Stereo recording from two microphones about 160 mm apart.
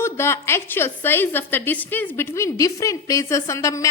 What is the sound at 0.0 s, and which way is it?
A woman's voice, 15° left (ahead or behind).